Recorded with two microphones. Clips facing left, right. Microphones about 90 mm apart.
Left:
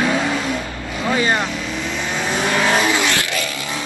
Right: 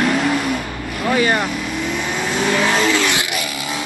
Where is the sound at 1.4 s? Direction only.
15° right (ahead or behind).